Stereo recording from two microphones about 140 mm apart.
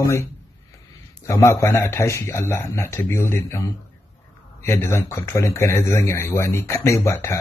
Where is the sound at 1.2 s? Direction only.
20° left (ahead or behind).